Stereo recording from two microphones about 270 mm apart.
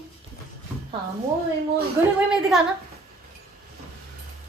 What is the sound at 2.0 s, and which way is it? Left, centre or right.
Speech, centre.